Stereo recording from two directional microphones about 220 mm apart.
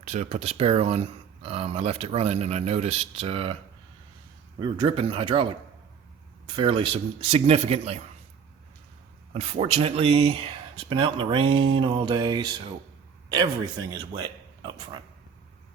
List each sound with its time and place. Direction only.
0.0 s speech: 30° right (ahead or behind)
4.6 s speech: 20° right (ahead or behind)
6.5 s speech: 20° right (ahead or behind)
9.3 s speech: 30° right (ahead or behind)